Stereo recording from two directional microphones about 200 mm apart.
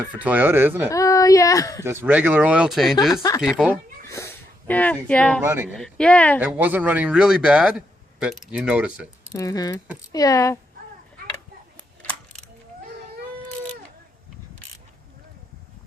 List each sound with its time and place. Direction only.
0.2 s speech: 10° right (ahead or behind)
0.9 s speech: 15° left (ahead or behind)
1.8 s speech: 10° right (ahead or behind)
4.1 s a sound: 15° left (ahead or behind)
4.7 s speech: 10° left (ahead or behind)
5.4 s speech: 10° right (ahead or behind)
5.7 s speech: 5° left (ahead or behind)
6.4 s speech: 10° right (ahead or behind)
9.3 s speech: 15° left (ahead or behind)